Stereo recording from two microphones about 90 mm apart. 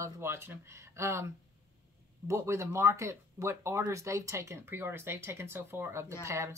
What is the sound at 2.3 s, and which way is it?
Speech, 30° right (ahead or behind).